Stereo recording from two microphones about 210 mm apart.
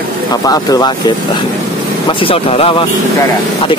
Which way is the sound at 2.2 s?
25° left (ahead or behind).